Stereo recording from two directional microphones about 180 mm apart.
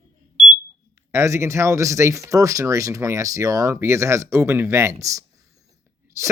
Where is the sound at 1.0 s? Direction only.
15° right (ahead or behind).